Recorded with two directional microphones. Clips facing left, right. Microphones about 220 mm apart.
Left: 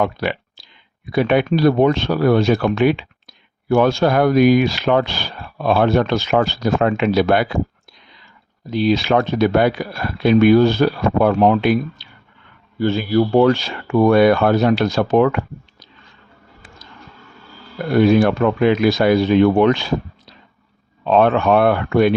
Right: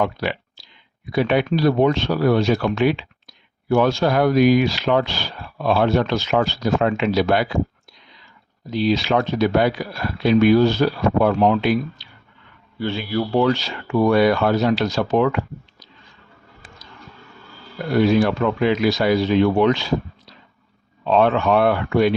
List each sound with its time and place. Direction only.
0.0 s speech: 55° left (ahead or behind)
8.7 s speech: 55° left (ahead or behind)
12.8 s speech: 45° left (ahead or behind)
17.9 s speech: 55° left (ahead or behind)
21.0 s speech: 55° left (ahead or behind)